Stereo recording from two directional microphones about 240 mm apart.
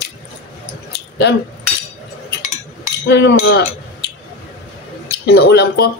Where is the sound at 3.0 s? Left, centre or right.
Left.